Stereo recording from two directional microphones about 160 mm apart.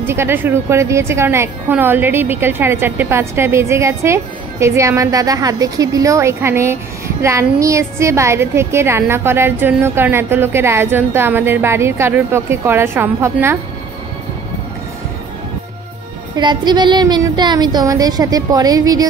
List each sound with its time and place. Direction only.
0.0 s a woman's voice: 15° right (ahead or behind)
16.3 s a woman's voice: 25° right (ahead or behind)